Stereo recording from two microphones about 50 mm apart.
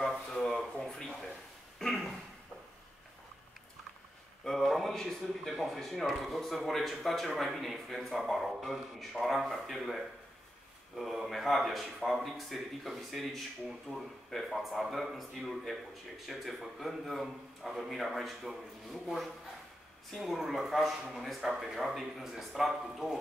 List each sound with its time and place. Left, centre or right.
0.3 s a sound: centre
4.5 s a man's voice: centre
20.1 s a man's voice: centre